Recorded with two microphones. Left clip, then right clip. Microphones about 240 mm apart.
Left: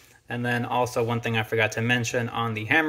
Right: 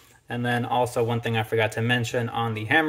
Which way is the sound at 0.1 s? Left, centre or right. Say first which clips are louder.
Right 1 dB; centre.